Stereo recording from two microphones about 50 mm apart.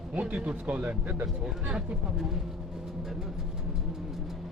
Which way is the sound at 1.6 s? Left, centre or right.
Right.